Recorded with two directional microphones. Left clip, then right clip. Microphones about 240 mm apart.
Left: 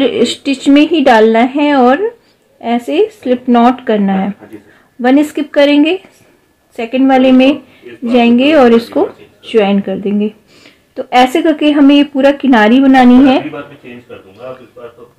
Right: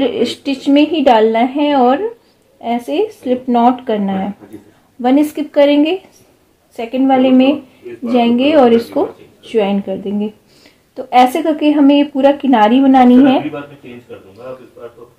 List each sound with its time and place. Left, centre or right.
0.0 s a woman's voice: left